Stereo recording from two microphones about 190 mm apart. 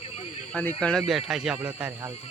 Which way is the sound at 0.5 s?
5° left (ahead or behind).